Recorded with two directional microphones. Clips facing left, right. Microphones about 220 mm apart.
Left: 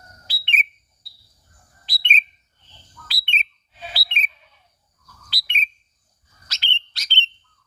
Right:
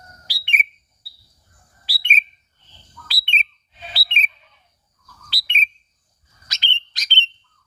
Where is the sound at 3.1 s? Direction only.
35° right (ahead or behind).